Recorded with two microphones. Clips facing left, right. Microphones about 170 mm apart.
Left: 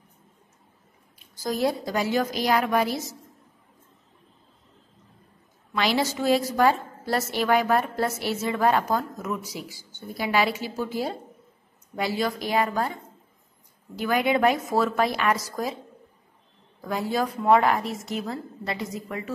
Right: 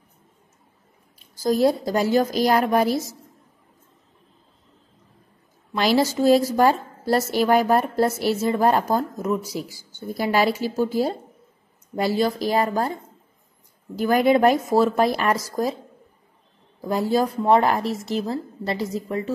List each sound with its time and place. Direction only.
1.4 s a woman's voice: 35° right (ahead or behind)
5.8 s a woman's voice: 40° right (ahead or behind)
13.9 s a woman's voice: 40° right (ahead or behind)
16.8 s a woman's voice: 35° right (ahead or behind)